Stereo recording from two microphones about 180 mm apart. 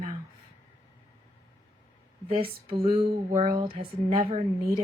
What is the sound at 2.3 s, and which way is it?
A woman's voice, 30° right (ahead or behind).